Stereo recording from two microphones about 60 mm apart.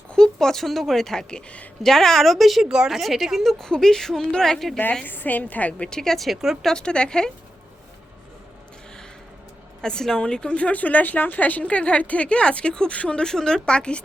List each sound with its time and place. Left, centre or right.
0.1 s a woman's voice: centre
1.8 s a woman's voice: centre
2.6 s a woman's voice: centre
5.0 s a woman's voice: left
5.9 s a woman's voice: centre
6.6 s speech: centre
9.8 s a woman's voice: centre